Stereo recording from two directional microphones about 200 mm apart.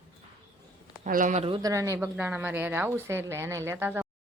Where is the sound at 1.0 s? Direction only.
40° right (ahead or behind).